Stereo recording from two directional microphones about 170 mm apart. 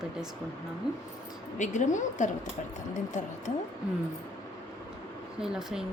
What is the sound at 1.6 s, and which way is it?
A woman's voice, 45° left (ahead or behind).